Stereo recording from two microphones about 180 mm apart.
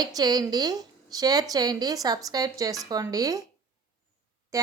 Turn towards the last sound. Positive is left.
turn(degrees=-20)  # may be behind; listen again after turning